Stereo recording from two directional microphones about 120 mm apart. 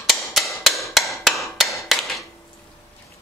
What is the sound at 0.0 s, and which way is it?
Hammer, centre (ahead or behind).